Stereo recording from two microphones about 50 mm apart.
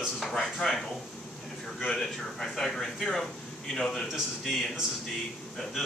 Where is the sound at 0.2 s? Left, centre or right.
Centre.